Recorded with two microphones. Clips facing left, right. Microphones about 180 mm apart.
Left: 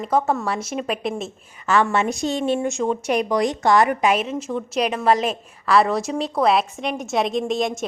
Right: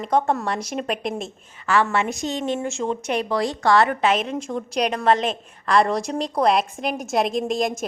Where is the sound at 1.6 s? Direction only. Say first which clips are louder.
Left 2 dB; 20° left (ahead or behind); by 7.9 s centre (ahead or behind).